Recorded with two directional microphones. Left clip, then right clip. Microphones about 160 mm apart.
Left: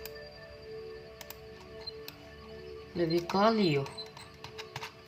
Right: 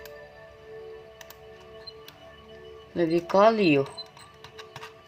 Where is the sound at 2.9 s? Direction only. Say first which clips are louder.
Right 8 dB; 75° right (ahead or behind).